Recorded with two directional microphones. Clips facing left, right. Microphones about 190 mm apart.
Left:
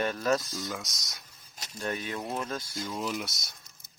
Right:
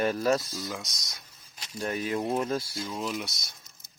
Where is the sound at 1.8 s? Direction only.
35° right (ahead or behind).